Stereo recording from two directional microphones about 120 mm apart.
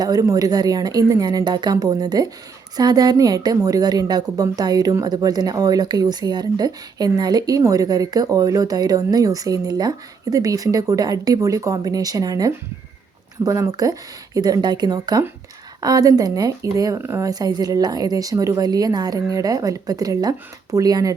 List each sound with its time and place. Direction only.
0.0 s a woman's voice: 30° right (ahead or behind)